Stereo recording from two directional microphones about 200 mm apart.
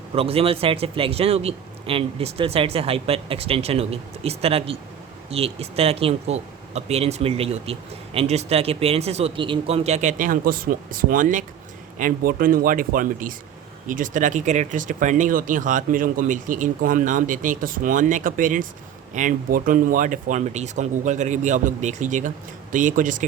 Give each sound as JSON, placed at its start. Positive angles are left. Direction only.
{"t": 0.1, "sound": "a man's voice", "side_deg": -30}